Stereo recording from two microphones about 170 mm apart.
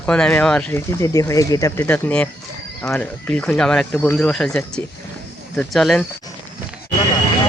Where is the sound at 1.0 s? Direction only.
20° left (ahead or behind); by 6.0 s centre (ahead or behind).